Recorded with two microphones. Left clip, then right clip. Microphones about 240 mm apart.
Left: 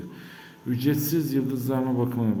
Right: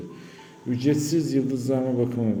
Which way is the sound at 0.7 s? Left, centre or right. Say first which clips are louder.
Right 2 dB; centre.